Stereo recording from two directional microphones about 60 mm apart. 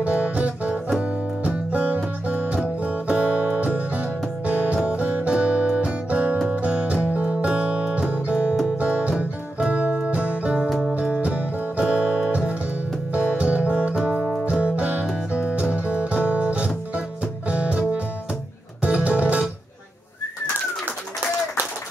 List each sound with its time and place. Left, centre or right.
0.0 s music: right